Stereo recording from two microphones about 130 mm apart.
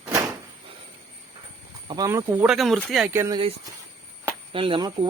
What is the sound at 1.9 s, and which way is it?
Speech, 25° right (ahead or behind).